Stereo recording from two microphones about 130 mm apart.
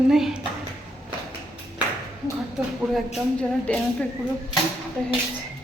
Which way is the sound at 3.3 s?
5° left (ahead or behind).